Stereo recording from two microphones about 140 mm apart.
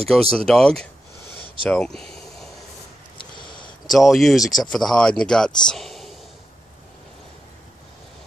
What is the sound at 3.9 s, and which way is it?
Speech, centre (ahead or behind).